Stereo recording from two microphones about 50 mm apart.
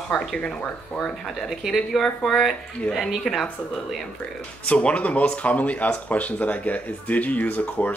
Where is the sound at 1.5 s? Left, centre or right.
Centre.